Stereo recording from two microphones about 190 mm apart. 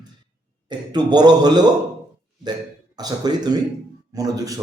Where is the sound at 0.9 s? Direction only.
20° right (ahead or behind).